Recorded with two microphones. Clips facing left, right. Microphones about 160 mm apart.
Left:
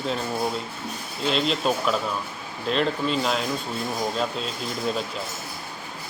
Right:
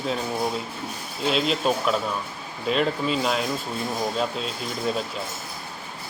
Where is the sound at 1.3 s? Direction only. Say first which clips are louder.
Right 1 dB; 5° right (ahead or behind).